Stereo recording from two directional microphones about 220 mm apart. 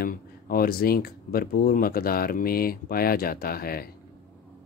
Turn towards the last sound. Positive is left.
turn(degrees=45)  # may be behind; listen again after turning